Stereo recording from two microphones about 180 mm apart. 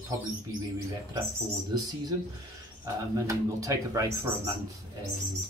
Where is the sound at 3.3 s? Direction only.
20° right (ahead or behind).